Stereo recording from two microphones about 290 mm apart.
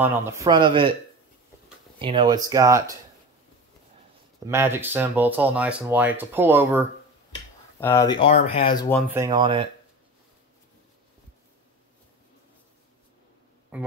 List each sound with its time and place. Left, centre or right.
0.0 s speech: centre
2.0 s speech: centre
4.5 s speech: centre
7.8 s speech: centre
9.1 s speech: centre
13.7 s music: centre